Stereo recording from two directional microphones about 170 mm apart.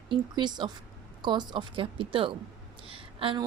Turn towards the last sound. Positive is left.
turn(degrees=-30)  # may be behind; listen again after turning